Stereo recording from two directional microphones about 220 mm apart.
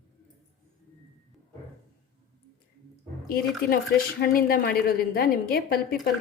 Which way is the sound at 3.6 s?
45° left (ahead or behind).